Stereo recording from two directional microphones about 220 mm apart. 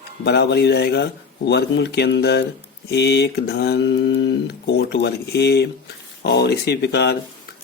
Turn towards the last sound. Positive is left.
turn(degrees=50)  # may be behind; listen again after turning